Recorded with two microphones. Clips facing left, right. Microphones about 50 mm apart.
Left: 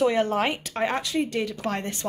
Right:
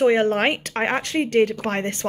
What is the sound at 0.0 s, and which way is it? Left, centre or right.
Speech, right.